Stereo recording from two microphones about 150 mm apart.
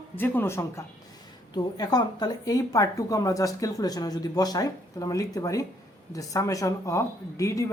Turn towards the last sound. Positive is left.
turn(degrees=20)  # may be behind; listen again after turning